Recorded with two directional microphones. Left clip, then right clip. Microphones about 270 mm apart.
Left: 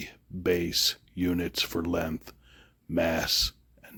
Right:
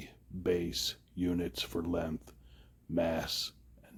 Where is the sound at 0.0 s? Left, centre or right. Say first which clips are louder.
Left 6 dB; left.